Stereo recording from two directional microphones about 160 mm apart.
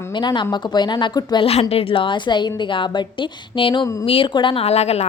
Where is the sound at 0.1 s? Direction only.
30° left (ahead or behind).